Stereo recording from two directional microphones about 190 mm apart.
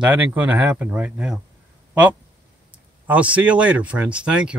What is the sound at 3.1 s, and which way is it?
Speech, 5° right (ahead or behind).